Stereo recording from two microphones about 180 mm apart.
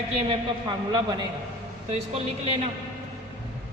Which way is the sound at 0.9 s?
25° right (ahead or behind).